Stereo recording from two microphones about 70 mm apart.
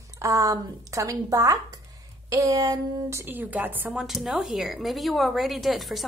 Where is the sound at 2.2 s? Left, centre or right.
Right.